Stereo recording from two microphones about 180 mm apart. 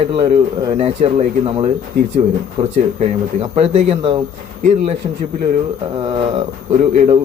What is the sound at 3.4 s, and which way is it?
Speech, 35° right (ahead or behind).